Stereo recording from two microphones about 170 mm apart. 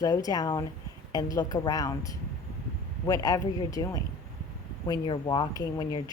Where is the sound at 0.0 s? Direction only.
20° left (ahead or behind).